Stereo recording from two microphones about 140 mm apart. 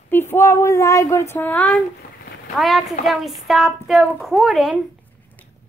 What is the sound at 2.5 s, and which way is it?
A woman's voice, centre (ahead or behind).